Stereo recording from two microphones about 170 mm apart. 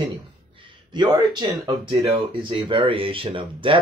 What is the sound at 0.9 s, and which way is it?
Speech, 25° right (ahead or behind).